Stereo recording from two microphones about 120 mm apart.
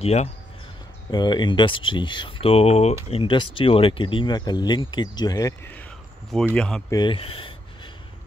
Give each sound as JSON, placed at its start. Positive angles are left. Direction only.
{"t": 0.0, "sound": "speech", "side_deg": 65}
{"t": 1.1, "sound": "speech", "side_deg": 35}
{"t": 3.1, "sound": "speech", "side_deg": 45}
{"t": 6.5, "sound": "speech", "side_deg": 10}
{"t": 6.9, "sound": "speech", "side_deg": 35}
{"t": 7.2, "sound": "speech", "side_deg": 50}